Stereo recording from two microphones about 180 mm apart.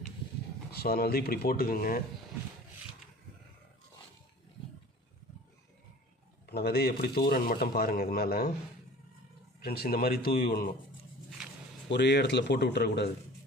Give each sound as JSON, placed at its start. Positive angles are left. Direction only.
{"t": 0.7, "sound": "speech", "side_deg": 60}
{"t": 6.4, "sound": "speech", "side_deg": 60}
{"t": 9.6, "sound": "speech", "side_deg": 55}
{"t": 11.9, "sound": "speech", "side_deg": 70}